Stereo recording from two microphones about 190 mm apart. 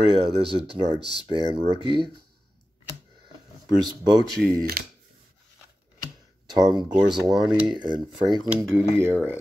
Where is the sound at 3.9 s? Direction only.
20° right (ahead or behind).